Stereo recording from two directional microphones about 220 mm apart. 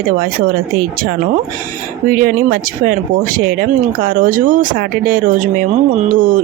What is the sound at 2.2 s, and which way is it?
Speech, 40° right (ahead or behind).